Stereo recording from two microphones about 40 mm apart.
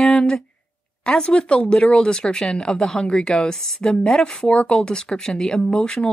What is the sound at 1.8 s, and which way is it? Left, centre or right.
Speech, centre.